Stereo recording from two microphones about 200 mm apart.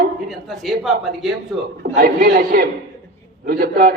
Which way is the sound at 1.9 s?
50° right (ahead or behind).